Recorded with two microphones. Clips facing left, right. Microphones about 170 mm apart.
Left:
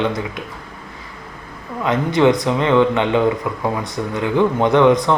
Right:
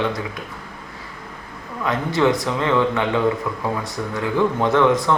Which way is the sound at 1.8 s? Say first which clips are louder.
Left 4 dB; 20° left (ahead or behind).